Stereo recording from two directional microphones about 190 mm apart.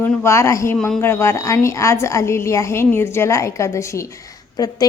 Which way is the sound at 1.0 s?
15° left (ahead or behind).